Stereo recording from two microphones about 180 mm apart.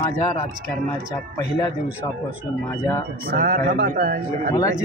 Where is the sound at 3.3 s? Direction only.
55° right (ahead or behind).